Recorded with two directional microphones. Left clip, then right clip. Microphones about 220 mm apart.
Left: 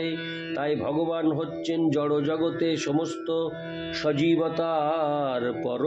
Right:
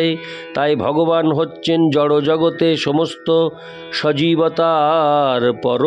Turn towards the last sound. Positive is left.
turn(degrees=-50)  # may be behind; listen again after turning